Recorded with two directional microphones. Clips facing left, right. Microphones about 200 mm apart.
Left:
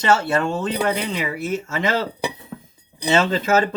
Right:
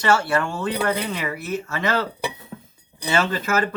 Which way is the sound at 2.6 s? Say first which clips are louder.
Left 6 dB; 20° left (ahead or behind).